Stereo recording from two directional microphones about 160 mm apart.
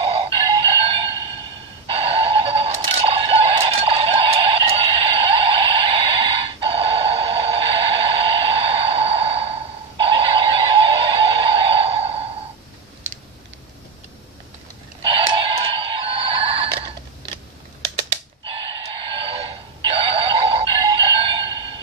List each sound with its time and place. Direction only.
0.0 s music: 35° right (ahead or behind)
15.0 s music: 35° right (ahead or behind)
18.4 s a sound: 35° right (ahead or behind)